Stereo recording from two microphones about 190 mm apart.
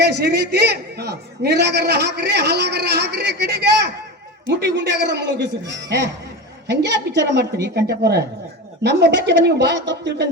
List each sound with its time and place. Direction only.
0.0 s a man's voice: 60° right (ahead or behind)
6.7 s a man's voice: 65° right (ahead or behind)